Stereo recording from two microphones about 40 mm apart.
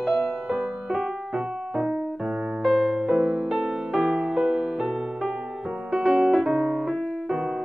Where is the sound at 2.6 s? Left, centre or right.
Centre.